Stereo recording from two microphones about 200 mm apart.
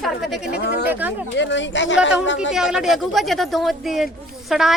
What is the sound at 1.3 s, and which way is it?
Speech, 65° left (ahead or behind).